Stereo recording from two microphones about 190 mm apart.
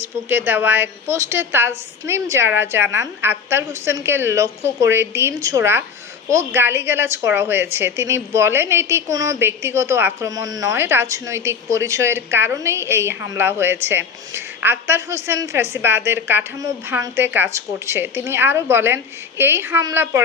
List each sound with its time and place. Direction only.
0.3 s a woman's voice: 10° right (ahead or behind)